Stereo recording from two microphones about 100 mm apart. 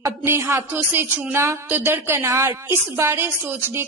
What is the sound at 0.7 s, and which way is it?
Speech, 20° right (ahead or behind).